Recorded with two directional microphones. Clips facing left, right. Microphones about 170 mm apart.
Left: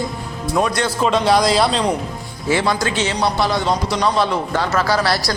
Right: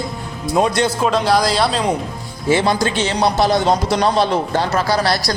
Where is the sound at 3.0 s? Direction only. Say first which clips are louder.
Right 4 dB; 40° right (ahead or behind).